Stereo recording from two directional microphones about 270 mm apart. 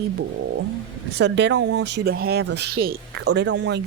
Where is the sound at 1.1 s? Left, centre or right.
Right.